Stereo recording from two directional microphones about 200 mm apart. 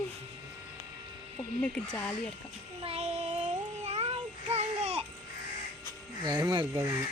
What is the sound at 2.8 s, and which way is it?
Child singing, 30° right (ahead or behind).